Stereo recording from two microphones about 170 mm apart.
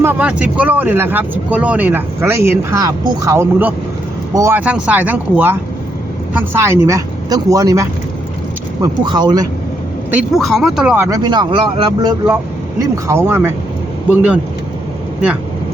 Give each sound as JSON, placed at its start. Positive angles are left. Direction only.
{"t": 0.0, "sound": "speech", "side_deg": -10}
{"t": 10.2, "sound": "speech", "side_deg": 0}
{"t": 11.0, "sound": "speech", "side_deg": -25}